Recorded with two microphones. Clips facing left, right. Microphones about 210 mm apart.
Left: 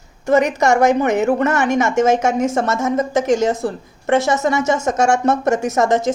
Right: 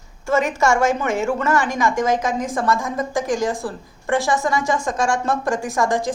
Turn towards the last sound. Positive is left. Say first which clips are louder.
# left 5 dB
turn(degrees=25)  # may be behind; listen again after turning